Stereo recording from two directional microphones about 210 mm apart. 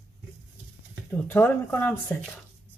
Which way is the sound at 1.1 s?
10° left (ahead or behind).